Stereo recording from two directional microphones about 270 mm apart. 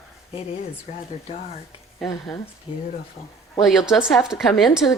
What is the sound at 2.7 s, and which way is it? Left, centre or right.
Speech, centre.